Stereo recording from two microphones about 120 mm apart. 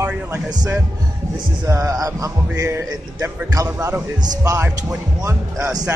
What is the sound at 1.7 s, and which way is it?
Speech, 30° right (ahead or behind).